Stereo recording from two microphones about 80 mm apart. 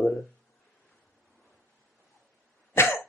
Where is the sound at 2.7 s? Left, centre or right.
Left.